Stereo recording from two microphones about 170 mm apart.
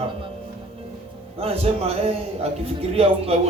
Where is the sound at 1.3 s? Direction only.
35° right (ahead or behind).